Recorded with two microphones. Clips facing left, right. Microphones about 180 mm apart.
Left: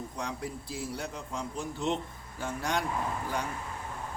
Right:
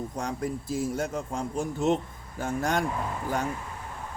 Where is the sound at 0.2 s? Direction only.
45° right (ahead or behind).